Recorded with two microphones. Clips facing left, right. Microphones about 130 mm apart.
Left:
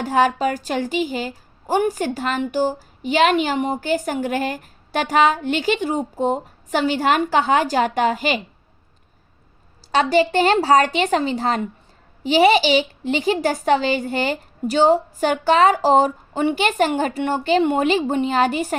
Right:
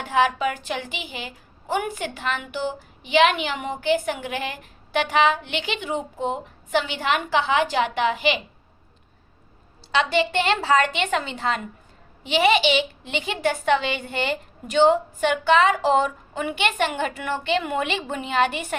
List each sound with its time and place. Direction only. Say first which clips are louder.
0.0 s a woman's voice: left 3 dB; 40° left (ahead or behind)
9.9 s a woman's voice: left 5 dB; 40° left (ahead or behind)